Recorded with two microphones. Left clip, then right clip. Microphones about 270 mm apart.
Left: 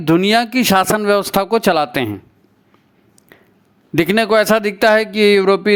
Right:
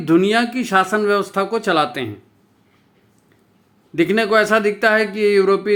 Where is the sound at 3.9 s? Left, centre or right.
Left.